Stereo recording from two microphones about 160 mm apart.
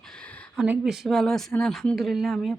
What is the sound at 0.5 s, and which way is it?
Speech, 5° right (ahead or behind).